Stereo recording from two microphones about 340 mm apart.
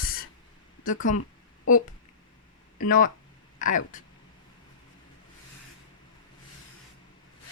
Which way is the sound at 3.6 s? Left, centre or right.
Left.